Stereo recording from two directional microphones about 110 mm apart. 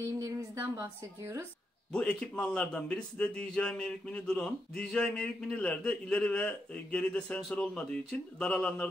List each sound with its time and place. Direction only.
0.2 s a woman's voice: 30° right (ahead or behind)
1.9 s a man's voice: 10° left (ahead or behind)